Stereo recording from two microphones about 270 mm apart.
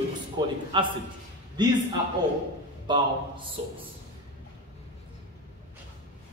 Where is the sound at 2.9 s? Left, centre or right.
Centre.